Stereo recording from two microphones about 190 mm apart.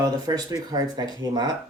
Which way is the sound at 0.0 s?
20° right (ahead or behind).